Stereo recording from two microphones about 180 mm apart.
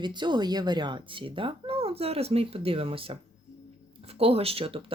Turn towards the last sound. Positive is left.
turn(degrees=-30)  # may be behind; listen again after turning